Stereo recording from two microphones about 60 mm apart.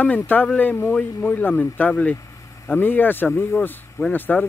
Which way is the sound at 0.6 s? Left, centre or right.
Left.